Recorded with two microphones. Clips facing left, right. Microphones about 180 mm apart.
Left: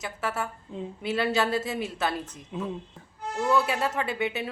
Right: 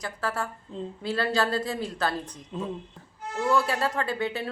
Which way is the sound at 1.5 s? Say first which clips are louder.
Even; 20° left (ahead or behind).